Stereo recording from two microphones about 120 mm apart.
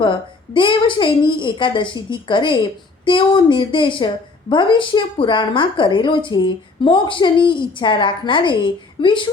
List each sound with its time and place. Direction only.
0.0 s a woman's voice: 45° left (ahead or behind)